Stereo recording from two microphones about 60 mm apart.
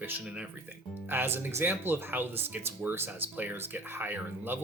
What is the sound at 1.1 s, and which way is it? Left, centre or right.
Speech, right.